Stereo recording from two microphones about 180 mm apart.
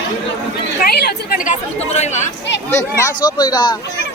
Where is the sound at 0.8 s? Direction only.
60° left (ahead or behind).